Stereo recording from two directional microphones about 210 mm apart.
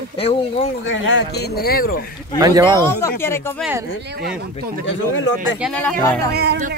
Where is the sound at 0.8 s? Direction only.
60° left (ahead or behind); by 2.0 s 45° left (ahead or behind).